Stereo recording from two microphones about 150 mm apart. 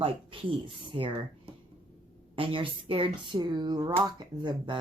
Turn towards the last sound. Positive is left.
turn(degrees=-30)  # may be behind; listen again after turning